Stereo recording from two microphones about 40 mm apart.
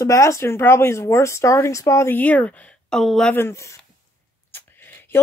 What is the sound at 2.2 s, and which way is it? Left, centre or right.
Speech, left.